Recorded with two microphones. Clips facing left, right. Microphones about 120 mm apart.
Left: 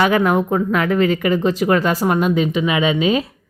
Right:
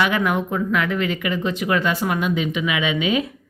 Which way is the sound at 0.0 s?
40° left (ahead or behind).